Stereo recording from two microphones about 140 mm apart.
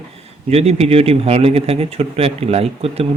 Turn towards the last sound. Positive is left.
turn(degrees=-45)  # may be behind; listen again after turning